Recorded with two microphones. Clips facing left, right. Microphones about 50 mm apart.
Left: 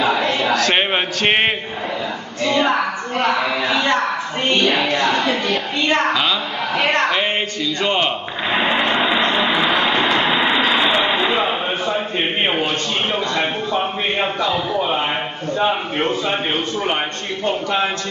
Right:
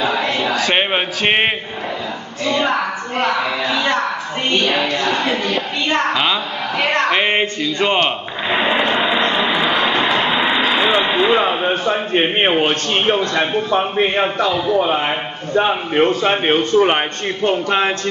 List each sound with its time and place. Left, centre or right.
0.5 s a man's voice: centre
5.3 s a woman's voice: centre
7.1 s music: right
8.0 s a sound: centre
11.0 s speech: centre
11.8 s a man's voice: right
16.1 s a man's voice: right